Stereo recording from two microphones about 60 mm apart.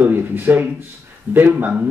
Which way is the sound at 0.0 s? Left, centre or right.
Right.